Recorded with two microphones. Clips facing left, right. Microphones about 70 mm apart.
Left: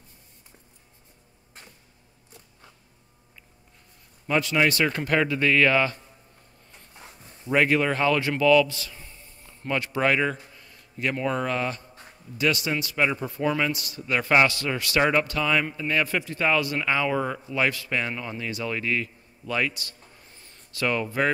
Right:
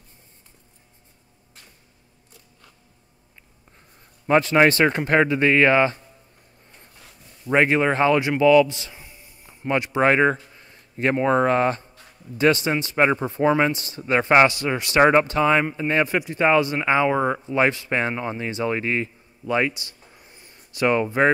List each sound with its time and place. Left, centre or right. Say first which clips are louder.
4.3 s speech: right 6 dB; right
7.4 s a man's voice: right 3 dB; right